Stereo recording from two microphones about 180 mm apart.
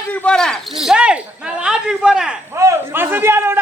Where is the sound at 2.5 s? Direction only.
15° right (ahead or behind).